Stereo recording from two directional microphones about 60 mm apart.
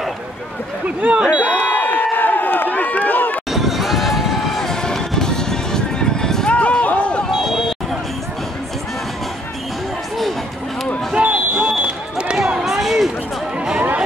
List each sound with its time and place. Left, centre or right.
0.8 s speech: centre
1.4 s a sound: left
3.5 s vehicle: centre
6.5 s run: left
11.1 s smoke detector: centre
12.4 s a sound: centre